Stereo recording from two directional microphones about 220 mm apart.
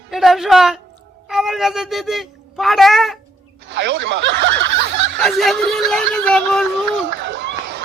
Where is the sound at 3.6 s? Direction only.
50° right (ahead or behind).